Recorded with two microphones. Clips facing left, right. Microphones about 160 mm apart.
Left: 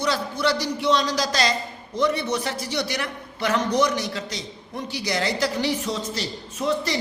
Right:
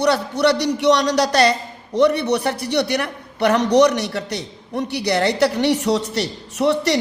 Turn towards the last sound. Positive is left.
turn(degrees=-70)  # may be behind; listen again after turning